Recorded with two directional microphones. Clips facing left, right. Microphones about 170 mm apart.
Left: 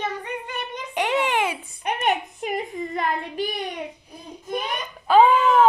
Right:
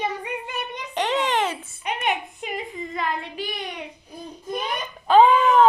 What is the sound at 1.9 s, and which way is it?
A woman's voice, 45° left (ahead or behind).